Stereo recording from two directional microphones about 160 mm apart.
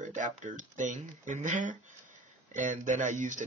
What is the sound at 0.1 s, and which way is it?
Speech, 50° right (ahead or behind).